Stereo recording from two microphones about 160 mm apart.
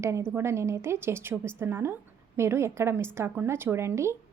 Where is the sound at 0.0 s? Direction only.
15° right (ahead or behind).